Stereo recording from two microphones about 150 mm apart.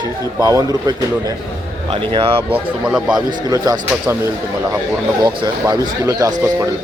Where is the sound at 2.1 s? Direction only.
40° right (ahead or behind).